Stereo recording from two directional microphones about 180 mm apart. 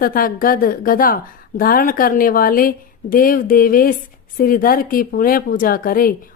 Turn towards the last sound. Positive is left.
turn(degrees=55)  # may be behind; listen again after turning